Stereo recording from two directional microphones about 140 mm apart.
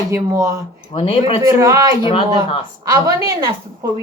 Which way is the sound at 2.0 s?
40° left (ahead or behind).